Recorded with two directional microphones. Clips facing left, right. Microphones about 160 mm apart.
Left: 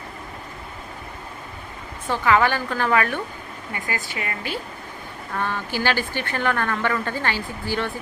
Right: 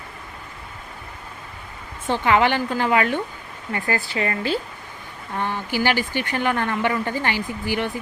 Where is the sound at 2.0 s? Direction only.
25° right (ahead or behind).